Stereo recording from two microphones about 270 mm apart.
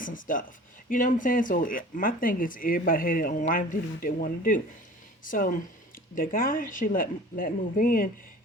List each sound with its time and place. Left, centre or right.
0.0 s speech: left